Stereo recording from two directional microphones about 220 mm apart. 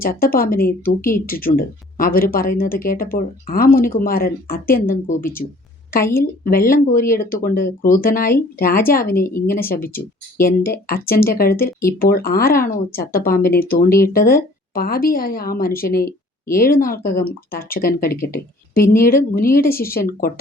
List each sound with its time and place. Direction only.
0.0 s speech: 40° left (ahead or behind)